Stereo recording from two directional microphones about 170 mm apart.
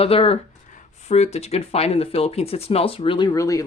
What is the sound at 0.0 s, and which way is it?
Speech, 35° left (ahead or behind).